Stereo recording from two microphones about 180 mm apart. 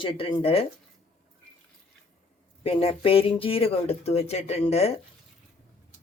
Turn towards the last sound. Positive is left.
turn(degrees=35)  # may be behind; listen again after turning